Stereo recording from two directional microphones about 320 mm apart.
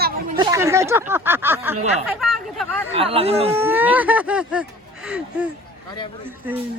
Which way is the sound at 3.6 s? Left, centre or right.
Centre.